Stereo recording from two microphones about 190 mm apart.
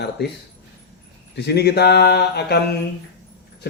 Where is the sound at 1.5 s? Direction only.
60° left (ahead or behind).